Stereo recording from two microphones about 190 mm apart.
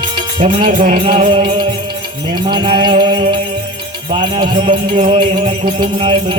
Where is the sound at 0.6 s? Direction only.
50° right (ahead or behind).